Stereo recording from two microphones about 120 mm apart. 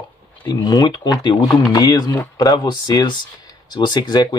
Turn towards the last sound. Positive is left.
turn(degrees=35)  # may be behind; listen again after turning